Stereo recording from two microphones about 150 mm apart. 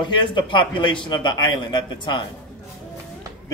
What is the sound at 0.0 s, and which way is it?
A man's voice, 30° left (ahead or behind).